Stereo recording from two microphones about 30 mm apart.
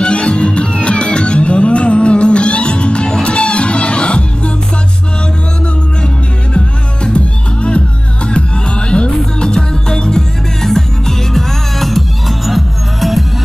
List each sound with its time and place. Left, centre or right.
0.0 s music: left
6.5 s music: left
10.6 s music: centre
11.9 s music: centre